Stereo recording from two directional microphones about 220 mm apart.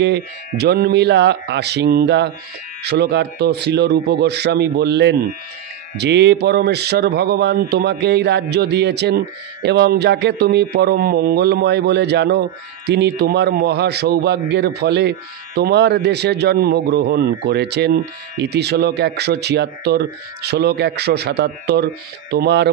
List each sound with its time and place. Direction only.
0.0 s speech: 50° right (ahead or behind)